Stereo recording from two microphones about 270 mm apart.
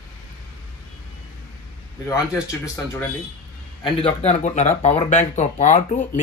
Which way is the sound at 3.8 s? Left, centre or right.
Left.